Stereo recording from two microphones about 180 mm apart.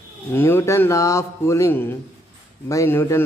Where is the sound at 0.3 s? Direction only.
10° left (ahead or behind).